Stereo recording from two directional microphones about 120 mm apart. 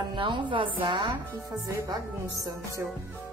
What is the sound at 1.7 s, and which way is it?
Speech, 30° right (ahead or behind).